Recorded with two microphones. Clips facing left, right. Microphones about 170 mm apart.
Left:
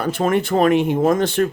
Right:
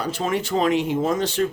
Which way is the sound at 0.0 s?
55° left (ahead or behind).